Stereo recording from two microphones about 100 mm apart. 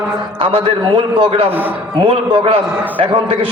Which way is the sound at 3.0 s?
55° right (ahead or behind).